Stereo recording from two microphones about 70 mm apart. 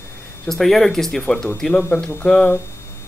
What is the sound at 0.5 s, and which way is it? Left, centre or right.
Speech, centre.